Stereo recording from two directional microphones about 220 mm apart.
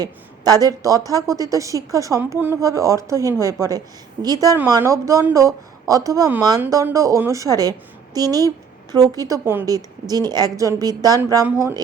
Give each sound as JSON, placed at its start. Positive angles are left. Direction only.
{"t": 0.0, "sound": "a woman's voice", "side_deg": -15}